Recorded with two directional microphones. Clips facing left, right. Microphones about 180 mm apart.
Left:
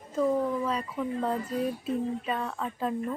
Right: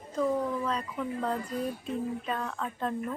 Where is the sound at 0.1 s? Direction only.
5° left (ahead or behind).